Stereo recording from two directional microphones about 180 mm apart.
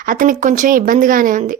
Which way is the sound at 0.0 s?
50° right (ahead or behind).